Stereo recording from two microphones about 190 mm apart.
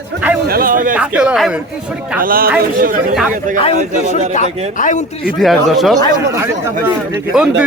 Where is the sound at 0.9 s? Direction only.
5° right (ahead or behind).